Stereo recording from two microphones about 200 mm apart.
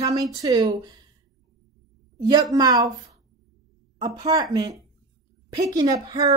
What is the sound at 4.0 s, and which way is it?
Speech, 20° right (ahead or behind).